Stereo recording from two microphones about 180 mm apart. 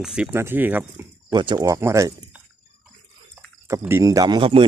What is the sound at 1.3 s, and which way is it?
Speech, 25° right (ahead or behind).